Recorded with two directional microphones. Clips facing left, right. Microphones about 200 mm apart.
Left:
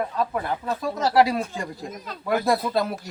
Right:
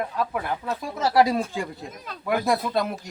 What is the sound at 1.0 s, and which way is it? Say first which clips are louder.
Speech: even; 10° right (ahead or behind).